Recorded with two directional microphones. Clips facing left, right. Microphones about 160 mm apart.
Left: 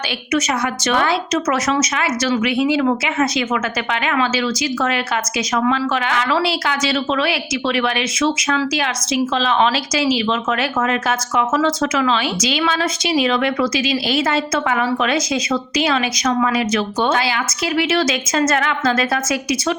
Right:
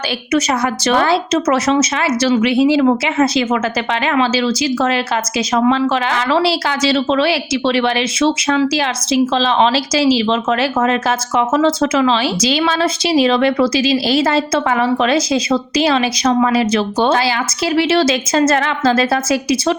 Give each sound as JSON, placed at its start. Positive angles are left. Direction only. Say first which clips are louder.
{"t": 0.3, "sound": "a woman's voice", "louder": "right 3 dB", "side_deg": -35}